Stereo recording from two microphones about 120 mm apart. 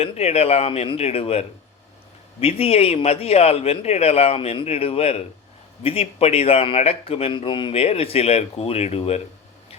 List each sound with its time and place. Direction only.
0.0 s speech: 60° left (ahead or behind)